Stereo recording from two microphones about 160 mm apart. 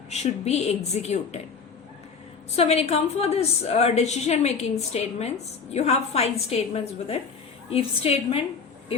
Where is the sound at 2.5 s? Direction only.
40° left (ahead or behind).